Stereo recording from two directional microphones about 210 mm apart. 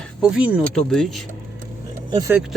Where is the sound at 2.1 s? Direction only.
20° right (ahead or behind).